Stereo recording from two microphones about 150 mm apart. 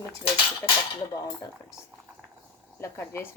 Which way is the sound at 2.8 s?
15° left (ahead or behind).